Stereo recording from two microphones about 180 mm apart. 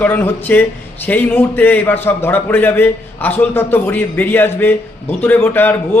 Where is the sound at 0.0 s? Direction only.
10° left (ahead or behind).